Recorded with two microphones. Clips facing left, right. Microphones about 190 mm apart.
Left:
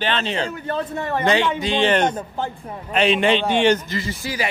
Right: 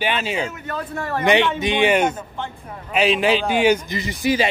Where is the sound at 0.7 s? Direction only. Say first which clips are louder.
Left 2 dB; 25° left (ahead or behind).